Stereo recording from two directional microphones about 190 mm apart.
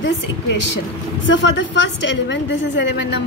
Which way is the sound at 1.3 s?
70° left (ahead or behind).